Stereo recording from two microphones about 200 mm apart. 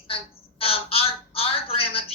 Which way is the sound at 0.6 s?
30° left (ahead or behind).